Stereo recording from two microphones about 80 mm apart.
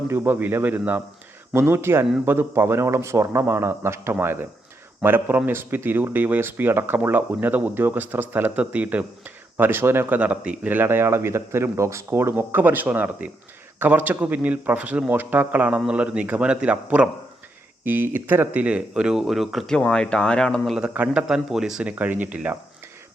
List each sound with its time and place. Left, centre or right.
0.1 s a man's voice: right
10.2 s speech: centre
17.8 s speech: right; by 19.7 s centre
19.7 s speech: centre
20.9 s speech: centre
21.9 s speech: right